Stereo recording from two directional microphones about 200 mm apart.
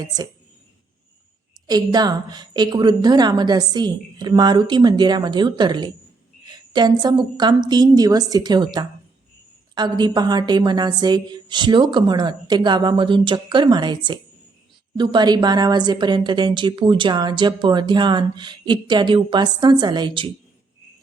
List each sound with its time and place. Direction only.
1.6 s a woman's voice: 20° right (ahead or behind)